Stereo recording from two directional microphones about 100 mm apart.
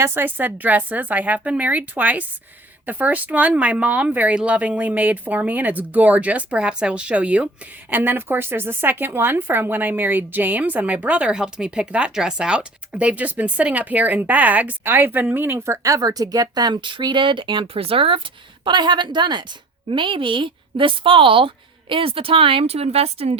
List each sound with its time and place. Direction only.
0.0 s a woman's voice: 20° right (ahead or behind); by 18.2 s 65° right (ahead or behind)
18.6 s a woman's voice: 50° right (ahead or behind); by 23.4 s 85° right